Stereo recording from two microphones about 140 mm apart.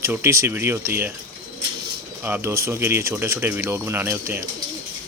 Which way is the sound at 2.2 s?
15° right (ahead or behind).